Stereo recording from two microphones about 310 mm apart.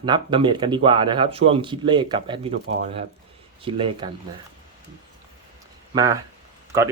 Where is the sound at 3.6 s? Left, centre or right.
Centre.